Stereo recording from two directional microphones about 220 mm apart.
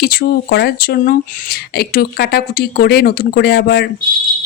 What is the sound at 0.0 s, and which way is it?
Speech, 45° left (ahead or behind).